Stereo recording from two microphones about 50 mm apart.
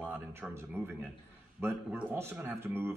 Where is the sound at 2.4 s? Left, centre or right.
Right.